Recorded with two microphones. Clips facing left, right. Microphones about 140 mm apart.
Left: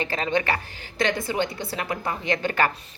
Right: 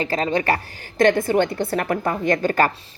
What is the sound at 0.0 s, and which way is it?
A woman's voice, 35° right (ahead or behind).